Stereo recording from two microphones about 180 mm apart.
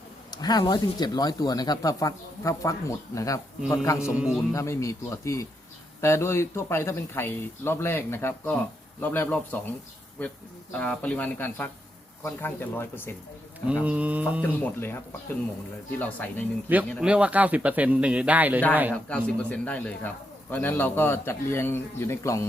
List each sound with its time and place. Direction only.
0.3 s a man's voice: 20° left (ahead or behind)
4.1 s speech: 5° right (ahead or behind)
4.5 s a man's voice: 15° left (ahead or behind)
13.8 s speech: 5° right (ahead or behind)
14.4 s a man's voice: 10° left (ahead or behind)
16.0 s a man's voice: 10° left (ahead or behind)
17.0 s speech: 5° right (ahead or behind)
19.0 s a man's voice: 5° left (ahead or behind)